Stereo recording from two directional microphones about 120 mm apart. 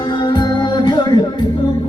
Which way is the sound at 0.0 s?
40° left (ahead or behind).